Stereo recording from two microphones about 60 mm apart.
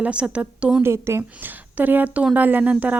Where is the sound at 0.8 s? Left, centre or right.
Right.